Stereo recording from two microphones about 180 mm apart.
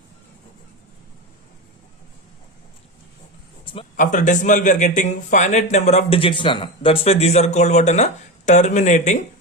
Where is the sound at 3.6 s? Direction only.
30° left (ahead or behind).